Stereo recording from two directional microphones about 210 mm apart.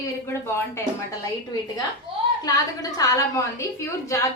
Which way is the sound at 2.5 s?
15° left (ahead or behind).